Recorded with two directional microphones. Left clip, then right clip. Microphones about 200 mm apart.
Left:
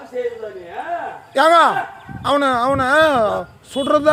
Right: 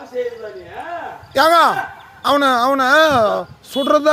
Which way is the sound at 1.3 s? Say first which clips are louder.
Even; 15° right (ahead or behind).